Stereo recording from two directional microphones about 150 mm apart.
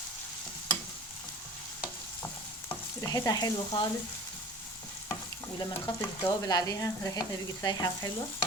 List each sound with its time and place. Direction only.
3.0 s frying: 25° left (ahead or behind)
5.5 s frying: 25° left (ahead or behind)